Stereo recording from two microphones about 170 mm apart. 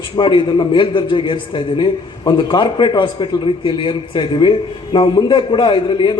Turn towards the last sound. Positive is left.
turn(degrees=25)  # may be behind; listen again after turning